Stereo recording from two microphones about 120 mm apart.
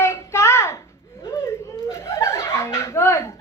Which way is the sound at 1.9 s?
20° left (ahead or behind).